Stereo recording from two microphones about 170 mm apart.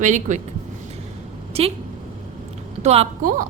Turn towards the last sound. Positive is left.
turn(degrees=-50)  # may be behind; listen again after turning